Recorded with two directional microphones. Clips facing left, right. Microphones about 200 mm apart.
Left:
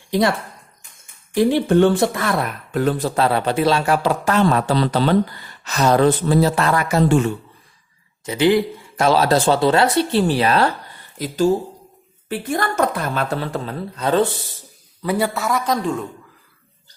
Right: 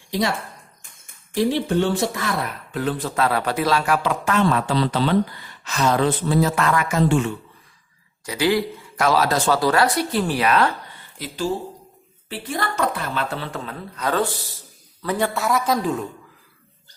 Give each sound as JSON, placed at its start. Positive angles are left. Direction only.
{"t": 0.1, "sound": "speech", "side_deg": 55}
{"t": 1.4, "sound": "speech", "side_deg": 55}
{"t": 2.7, "sound": "speech", "side_deg": 45}
{"t": 3.2, "sound": "a woman's voice", "side_deg": 30}
{"t": 8.2, "sound": "speech", "side_deg": 25}
{"t": 12.3, "sound": "a woman's voice", "side_deg": 50}
{"t": 15.0, "sound": "a man's voice", "side_deg": 10}